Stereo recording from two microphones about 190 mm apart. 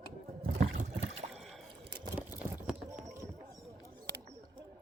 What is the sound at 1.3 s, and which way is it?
Rowboat, centre (ahead or behind).